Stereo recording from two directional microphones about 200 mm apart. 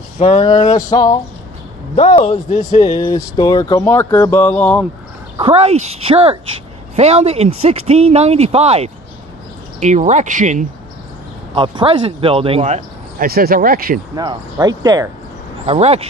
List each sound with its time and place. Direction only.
0.2 s a sound: 25° left (ahead or behind)
2.0 s a man's voice: 30° left (ahead or behind)
3.0 s speech: 20° left (ahead or behind)
5.4 s speech: 30° right (ahead or behind)
11.5 s speech: 25° right (ahead or behind)
13.3 s speech: 50° right (ahead or behind)
14.1 s speech: 20° right (ahead or behind)
15.6 s speech: 30° right (ahead or behind)